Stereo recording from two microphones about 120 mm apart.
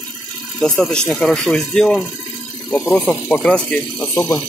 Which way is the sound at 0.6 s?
5° left (ahead or behind).